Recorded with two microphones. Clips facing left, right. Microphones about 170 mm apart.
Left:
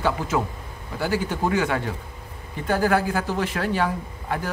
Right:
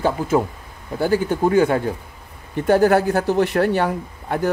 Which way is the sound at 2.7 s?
60° right (ahead or behind).